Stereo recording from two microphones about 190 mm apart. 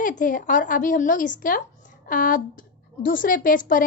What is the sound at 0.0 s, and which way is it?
A woman's voice, 45° left (ahead or behind).